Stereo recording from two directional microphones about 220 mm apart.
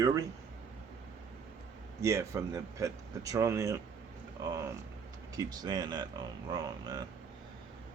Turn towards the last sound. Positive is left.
turn(degrees=-20)  # may be behind; listen again after turning